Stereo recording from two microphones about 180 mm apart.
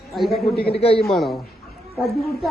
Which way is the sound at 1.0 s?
Centre (ahead or behind).